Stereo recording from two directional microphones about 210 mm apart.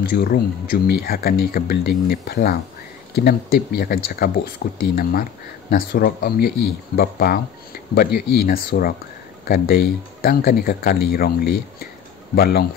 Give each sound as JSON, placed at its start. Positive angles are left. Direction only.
{"t": 0.0, "sound": "speech", "side_deg": 45}